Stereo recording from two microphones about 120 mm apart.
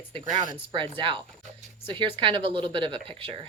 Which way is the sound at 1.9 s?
45° right (ahead or behind).